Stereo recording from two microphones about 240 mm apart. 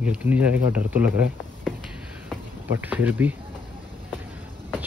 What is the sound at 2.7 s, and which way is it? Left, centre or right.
Speech, centre.